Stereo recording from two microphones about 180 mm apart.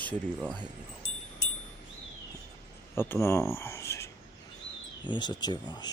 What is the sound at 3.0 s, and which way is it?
Speech, 15° left (ahead or behind).